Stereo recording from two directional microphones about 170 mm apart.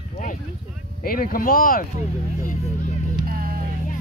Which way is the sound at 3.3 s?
60° right (ahead or behind).